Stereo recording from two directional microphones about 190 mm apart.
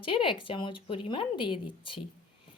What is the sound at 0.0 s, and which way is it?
Speech, 25° left (ahead or behind).